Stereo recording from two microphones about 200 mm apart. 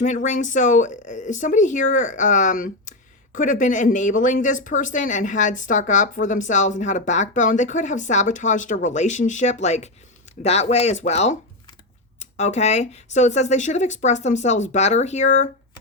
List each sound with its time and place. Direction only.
0.0 s speech: 35° left (ahead or behind)